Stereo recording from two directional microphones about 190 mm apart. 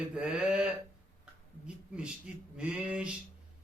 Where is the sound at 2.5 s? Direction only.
5° right (ahead or behind).